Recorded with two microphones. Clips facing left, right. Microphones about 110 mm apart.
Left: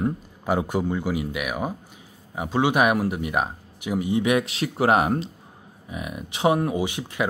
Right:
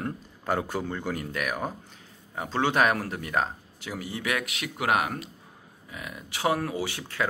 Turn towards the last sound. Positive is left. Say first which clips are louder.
# left 5 dB
turn(degrees=15)  # may be behind; listen again after turning